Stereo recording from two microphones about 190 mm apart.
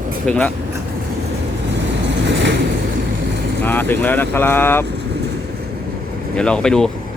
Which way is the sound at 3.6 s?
10° left (ahead or behind).